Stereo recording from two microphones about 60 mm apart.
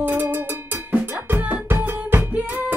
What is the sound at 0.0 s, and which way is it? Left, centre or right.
Cowbell, right.